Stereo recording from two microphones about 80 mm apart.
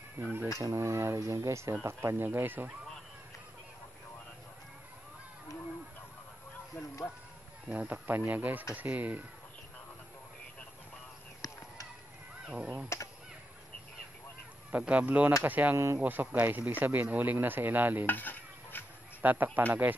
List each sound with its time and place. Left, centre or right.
0.2 s speech: right
0.6 s speech: right
7.6 s speech: centre
11.4 s a sound: left
12.9 s speech: left
14.7 s speech: centre
18.0 s stir: left
19.2 s speech: right